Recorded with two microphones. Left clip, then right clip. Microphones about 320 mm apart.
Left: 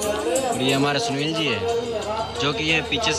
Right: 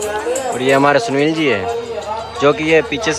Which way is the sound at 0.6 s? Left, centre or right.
Centre.